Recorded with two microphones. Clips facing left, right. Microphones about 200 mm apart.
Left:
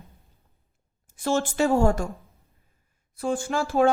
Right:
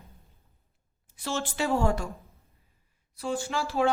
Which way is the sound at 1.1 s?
50° left (ahead or behind).